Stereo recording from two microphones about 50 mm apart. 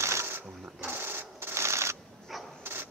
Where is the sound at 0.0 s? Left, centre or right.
Right.